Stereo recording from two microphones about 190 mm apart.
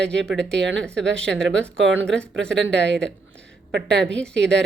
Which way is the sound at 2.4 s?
70° right (ahead or behind).